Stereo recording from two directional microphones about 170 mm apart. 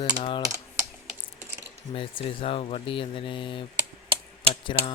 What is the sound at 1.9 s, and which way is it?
Speech, 30° left (ahead or behind).